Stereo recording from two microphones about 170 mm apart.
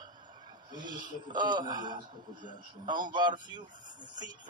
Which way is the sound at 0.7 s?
25° right (ahead or behind).